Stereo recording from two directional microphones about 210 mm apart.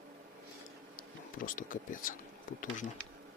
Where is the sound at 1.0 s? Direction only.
40° left (ahead or behind).